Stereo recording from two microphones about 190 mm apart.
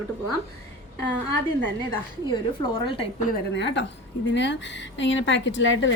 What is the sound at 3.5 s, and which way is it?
Speech, 70° left (ahead or behind).